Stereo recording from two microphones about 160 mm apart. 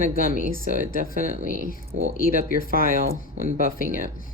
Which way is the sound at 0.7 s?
60° left (ahead or behind).